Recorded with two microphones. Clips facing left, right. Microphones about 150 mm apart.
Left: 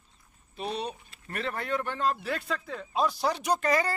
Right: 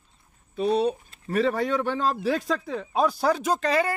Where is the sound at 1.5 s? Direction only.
90° right.